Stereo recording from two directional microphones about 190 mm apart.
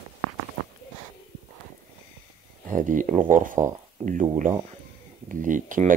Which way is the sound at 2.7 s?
45° right (ahead or behind).